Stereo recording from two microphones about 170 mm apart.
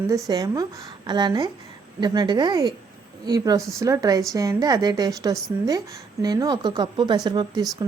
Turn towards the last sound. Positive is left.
turn(degrees=-25)  # may be behind; listen again after turning